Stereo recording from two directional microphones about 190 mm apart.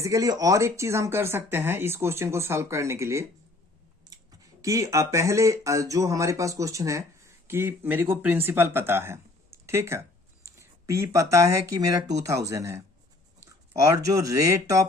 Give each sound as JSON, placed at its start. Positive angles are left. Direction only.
{"t": 0.0, "sound": "speech", "side_deg": -15}
{"t": 4.6, "sound": "speech", "side_deg": -15}
{"t": 13.8, "sound": "speech", "side_deg": -20}